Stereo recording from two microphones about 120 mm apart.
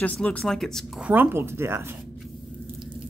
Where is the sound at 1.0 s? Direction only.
15° right (ahead or behind).